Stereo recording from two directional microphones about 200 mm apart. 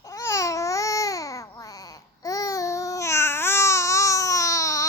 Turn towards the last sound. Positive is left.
turn(degrees=15)  # may be behind; listen again after turning